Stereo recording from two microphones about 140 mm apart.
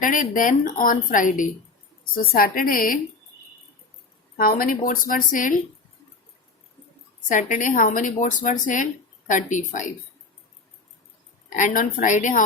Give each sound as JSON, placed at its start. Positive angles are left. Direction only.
{"t": 0.0, "sound": "a woman's voice", "side_deg": 75}
{"t": 2.1, "sound": "a woman's voice", "side_deg": 90}
{"t": 4.4, "sound": "a woman's voice", "side_deg": 90}
{"t": 7.3, "sound": "a woman's voice", "side_deg": 70}
{"t": 11.4, "sound": "a woman's voice", "side_deg": 70}